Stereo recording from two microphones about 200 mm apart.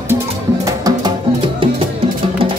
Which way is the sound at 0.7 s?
20° right (ahead or behind).